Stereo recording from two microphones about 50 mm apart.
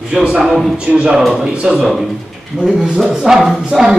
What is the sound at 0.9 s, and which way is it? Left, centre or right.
Speech, right.